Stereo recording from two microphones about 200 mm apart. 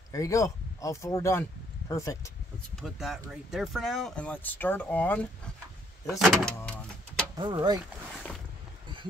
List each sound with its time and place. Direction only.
0.1 s speech: 15° left (ahead or behind)
2.7 s speech: centre (ahead or behind)
6.0 s vehicle: centre (ahead or behind)
7.3 s speech: 20° right (ahead or behind)